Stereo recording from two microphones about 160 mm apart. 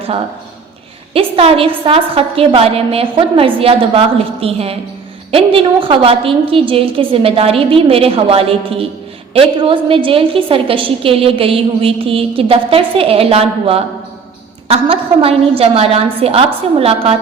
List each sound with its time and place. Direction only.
1.1 s a woman's voice: 35° right (ahead or behind)